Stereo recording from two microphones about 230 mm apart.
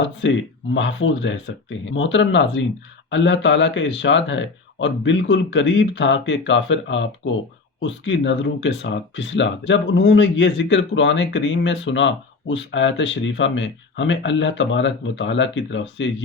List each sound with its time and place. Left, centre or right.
0.0 s speech: left